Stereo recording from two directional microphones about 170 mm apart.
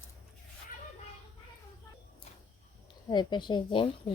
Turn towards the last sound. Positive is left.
turn(degrees=30)  # may be behind; listen again after turning